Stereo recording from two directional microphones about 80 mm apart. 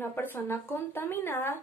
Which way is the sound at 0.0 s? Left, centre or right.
Left.